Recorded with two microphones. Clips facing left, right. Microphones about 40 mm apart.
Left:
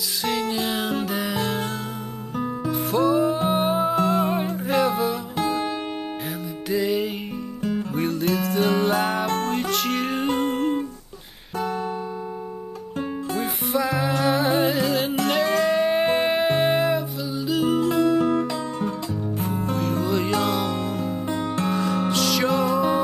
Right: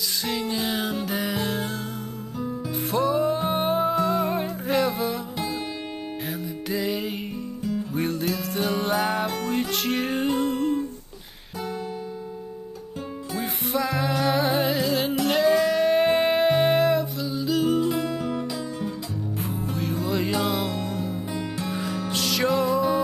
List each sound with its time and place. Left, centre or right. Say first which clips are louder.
0.2 s music: left 4 dB; centre
2.7 s music: left 3 dB; centre
3.9 s music: left 2 dB; left
4.2 s music: left 2 dB; centre
5.4 s music: left 8 dB; left
6.7 s music: left 5 dB; centre
9.2 s music: left 3 dB; left
9.5 s music: left 2 dB; centre
13.4 s music: left 1 dB; centre
18.1 s music: left 7 dB; left
19.4 s music: left 5 dB; centre
20.9 s music: left 3 dB; centre
21.3 s music: left 5 dB; left
22.1 s music: right 1 dB; centre